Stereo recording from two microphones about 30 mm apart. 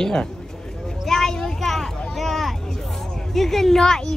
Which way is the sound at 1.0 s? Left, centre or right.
Centre.